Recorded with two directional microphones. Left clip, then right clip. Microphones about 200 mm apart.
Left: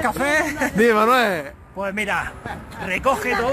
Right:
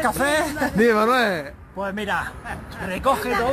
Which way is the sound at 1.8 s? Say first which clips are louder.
Left 2 dB; 55° left (ahead or behind).